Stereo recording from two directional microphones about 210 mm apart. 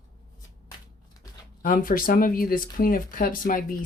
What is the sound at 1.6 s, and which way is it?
Speech, 40° left (ahead or behind).